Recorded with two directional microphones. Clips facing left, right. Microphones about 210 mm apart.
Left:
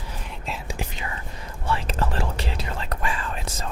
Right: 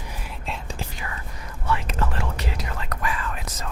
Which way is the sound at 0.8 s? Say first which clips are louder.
Left 2 dB; 20° left (ahead or behind).